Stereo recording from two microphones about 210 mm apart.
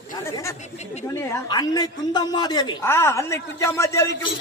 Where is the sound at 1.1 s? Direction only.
15° left (ahead or behind).